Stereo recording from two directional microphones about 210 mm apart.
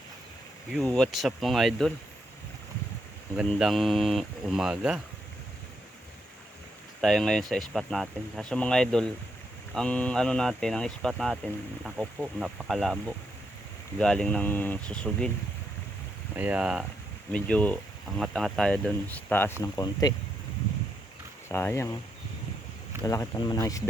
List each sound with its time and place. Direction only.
0.7 s speech: 5° left (ahead or behind)
3.3 s speech: centre (ahead or behind)
7.0 s speech: centre (ahead or behind)
16.3 s speech: 5° right (ahead or behind); by 20.1 s 15° left (ahead or behind)
21.5 s speech: 15° left (ahead or behind)
23.0 s speech: 15° left (ahead or behind)